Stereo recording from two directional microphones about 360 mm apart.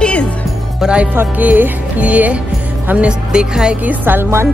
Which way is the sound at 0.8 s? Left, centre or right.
Centre.